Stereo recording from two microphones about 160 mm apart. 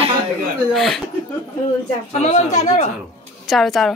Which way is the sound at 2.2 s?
45° left (ahead or behind).